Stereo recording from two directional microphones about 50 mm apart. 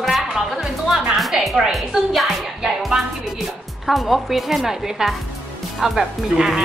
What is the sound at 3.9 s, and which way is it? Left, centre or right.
Speech, centre.